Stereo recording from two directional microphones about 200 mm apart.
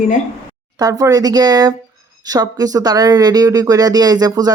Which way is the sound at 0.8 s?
15° right (ahead or behind).